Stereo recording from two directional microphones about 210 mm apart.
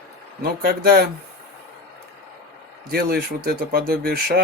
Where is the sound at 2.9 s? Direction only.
45° right (ahead or behind).